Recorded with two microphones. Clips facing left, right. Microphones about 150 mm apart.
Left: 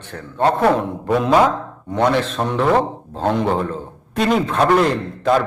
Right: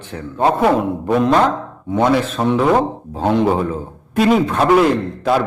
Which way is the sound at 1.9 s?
5° right (ahead or behind).